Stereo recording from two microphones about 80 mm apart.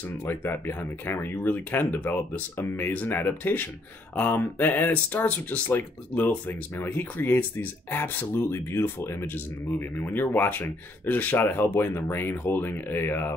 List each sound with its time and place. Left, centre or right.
0.2 s speech: left